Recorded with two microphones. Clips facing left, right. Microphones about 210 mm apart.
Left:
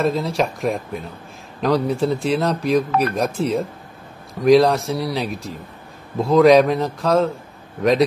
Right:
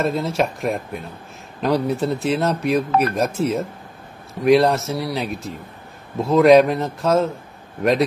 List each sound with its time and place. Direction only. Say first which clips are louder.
0.0 s speech: left 1 dB; centre (ahead or behind)